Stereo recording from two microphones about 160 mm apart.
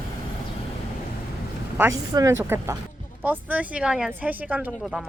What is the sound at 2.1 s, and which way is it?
A woman's voice, 20° right (ahead or behind).